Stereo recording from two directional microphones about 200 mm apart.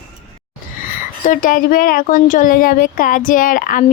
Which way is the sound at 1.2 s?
40° left (ahead or behind).